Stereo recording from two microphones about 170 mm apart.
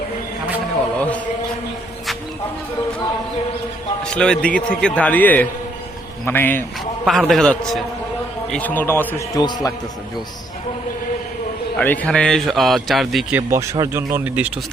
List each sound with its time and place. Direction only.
0.9 s a sound: 10° left (ahead or behind)
4.1 s a man's voice: 5° left (ahead or behind)
7.0 s a man's voice: centre (ahead or behind); by 9.7 s 25° left (ahead or behind)
11.8 s a man's voice: 10° left (ahead or behind)
13.5 s speech: 15° right (ahead or behind)